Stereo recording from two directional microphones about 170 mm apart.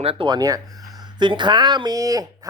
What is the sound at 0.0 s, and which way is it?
A man's voice, 30° right (ahead or behind).